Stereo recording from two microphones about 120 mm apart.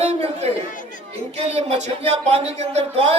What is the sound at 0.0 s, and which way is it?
Chatter, 65° right (ahead or behind).